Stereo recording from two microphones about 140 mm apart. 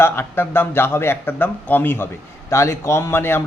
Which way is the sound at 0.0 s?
15° left (ahead or behind).